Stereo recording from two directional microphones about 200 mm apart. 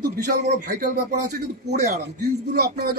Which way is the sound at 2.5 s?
50° right (ahead or behind).